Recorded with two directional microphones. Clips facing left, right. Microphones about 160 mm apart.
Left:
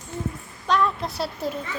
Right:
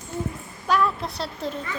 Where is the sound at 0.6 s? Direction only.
5° right (ahead or behind).